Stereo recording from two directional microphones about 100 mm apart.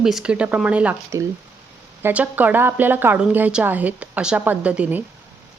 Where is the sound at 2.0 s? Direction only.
15° right (ahead or behind).